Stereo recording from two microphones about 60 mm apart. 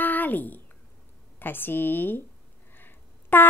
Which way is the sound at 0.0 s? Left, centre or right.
Left.